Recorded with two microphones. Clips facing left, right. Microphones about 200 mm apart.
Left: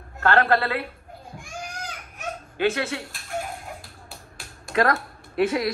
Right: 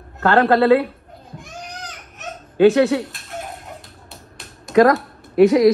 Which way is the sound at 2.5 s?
20° right (ahead or behind).